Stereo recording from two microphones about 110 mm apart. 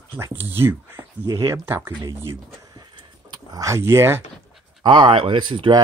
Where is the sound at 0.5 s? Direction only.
20° right (ahead or behind).